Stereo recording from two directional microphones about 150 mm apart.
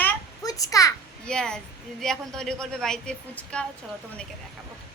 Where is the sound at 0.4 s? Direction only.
25° left (ahead or behind).